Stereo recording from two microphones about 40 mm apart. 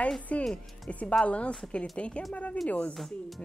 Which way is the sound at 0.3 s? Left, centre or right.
Left.